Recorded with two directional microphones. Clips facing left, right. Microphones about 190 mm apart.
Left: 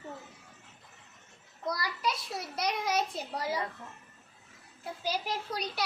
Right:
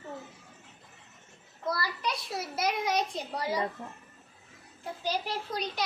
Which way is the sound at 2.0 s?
Centre (ahead or behind).